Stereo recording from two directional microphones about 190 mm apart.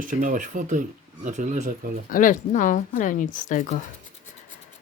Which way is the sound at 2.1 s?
45° left (ahead or behind).